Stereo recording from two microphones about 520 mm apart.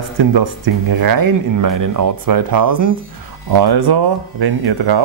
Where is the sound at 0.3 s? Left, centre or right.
Right.